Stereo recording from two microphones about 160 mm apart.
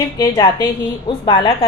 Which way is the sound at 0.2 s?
25° left (ahead or behind).